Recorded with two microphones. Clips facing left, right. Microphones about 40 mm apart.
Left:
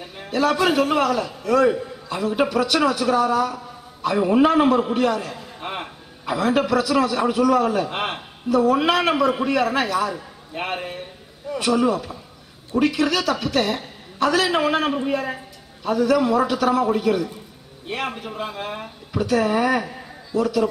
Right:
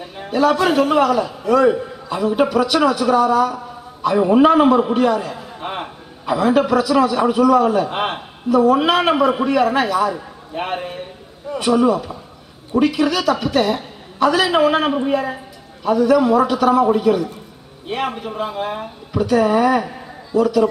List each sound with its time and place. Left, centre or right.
0.0 s a man's voice: centre